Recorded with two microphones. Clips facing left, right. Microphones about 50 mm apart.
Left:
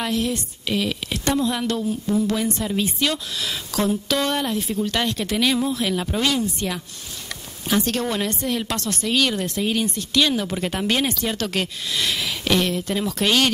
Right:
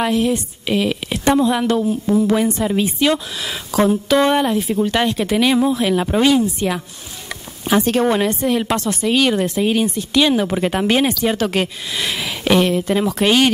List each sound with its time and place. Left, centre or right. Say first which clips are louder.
0.0 s speech: right 6 dB; centre
7.2 s a sound: right 6 dB; centre
8.3 s speech: right 7 dB; centre